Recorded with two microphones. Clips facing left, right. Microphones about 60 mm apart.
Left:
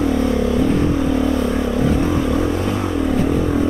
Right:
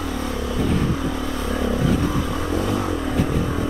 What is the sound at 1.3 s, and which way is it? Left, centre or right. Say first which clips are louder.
Vehicle: left 5 dB; left.